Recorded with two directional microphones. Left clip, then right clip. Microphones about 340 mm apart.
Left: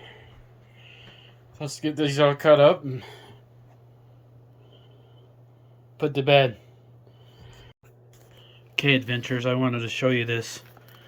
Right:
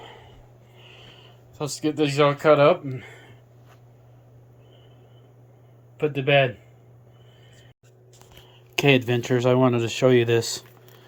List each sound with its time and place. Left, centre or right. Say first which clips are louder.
0.0 s a sound: right 3 dB; centre
2.8 s speech: even; centre
6.0 s speech: left 1 dB; centre
8.7 s speech: right 3 dB; centre